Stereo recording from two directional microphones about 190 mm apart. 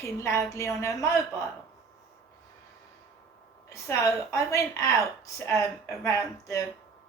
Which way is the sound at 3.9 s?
15° left (ahead or behind).